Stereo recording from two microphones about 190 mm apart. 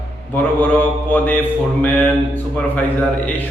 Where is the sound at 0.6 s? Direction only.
10° left (ahead or behind).